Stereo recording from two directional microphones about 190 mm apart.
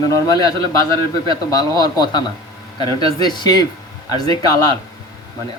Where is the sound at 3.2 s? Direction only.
20° left (ahead or behind).